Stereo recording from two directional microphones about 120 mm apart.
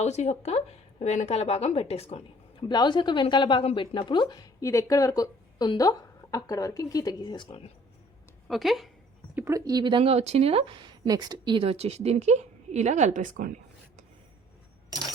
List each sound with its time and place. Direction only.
0.0 s speech: 65° left (ahead or behind)
2.6 s a woman's voice: 40° left (ahead or behind)
4.6 s a woman's voice: 25° left (ahead or behind)
8.4 s speech: centre (ahead or behind)
9.3 s speech: 25° right (ahead or behind)
11.6 s a woman's voice: 55° right (ahead or behind); by 13.4 s 90° right